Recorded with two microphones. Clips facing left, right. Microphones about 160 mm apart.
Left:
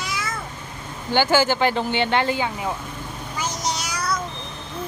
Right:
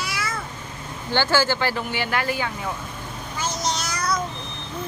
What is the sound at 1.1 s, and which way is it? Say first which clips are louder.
Speech: left 3 dB; 15° left (ahead or behind).